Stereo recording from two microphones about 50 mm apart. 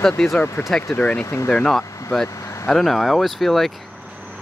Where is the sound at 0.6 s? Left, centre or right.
Left.